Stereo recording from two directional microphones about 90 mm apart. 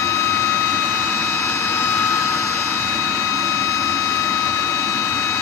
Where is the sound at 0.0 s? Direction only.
35° left (ahead or behind).